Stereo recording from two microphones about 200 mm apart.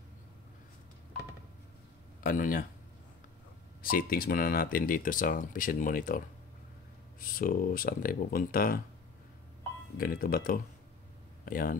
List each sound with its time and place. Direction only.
2.2 s speech: 45° left (ahead or behind)
3.8 s speech: 45° left (ahead or behind)
9.9 s speech: 45° left (ahead or behind)